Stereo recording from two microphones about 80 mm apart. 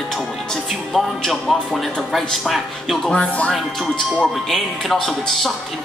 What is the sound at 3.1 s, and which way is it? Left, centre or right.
Speech, centre.